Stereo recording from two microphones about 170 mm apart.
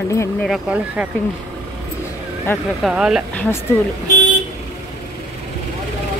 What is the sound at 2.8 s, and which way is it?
Speech, 5° right (ahead or behind).